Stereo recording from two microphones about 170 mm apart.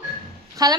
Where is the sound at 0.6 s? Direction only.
20° right (ahead or behind).